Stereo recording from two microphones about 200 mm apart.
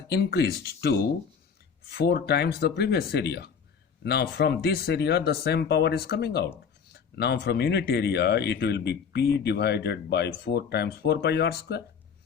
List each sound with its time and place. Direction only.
0.1 s speech: 50° left (ahead or behind)
1.9 s speech: 55° left (ahead or behind)